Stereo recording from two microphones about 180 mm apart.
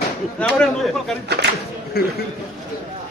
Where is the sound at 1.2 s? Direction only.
65° right (ahead or behind).